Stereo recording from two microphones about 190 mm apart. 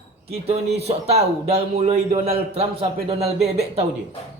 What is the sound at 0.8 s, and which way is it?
A man's voice, 35° right (ahead or behind).